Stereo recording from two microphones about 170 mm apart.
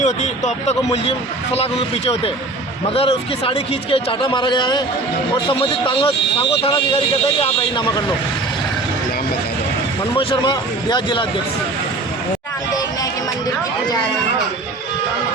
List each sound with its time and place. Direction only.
0.0 s speech: 45° left (ahead or behind)
2.9 s a man's voice: 35° left (ahead or behind)
7.4 s a man's voice: 25° left (ahead or behind)
10.2 s a man's voice: 30° left (ahead or behind)